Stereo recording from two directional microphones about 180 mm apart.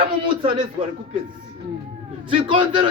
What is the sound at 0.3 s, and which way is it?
Speech, 25° right (ahead or behind).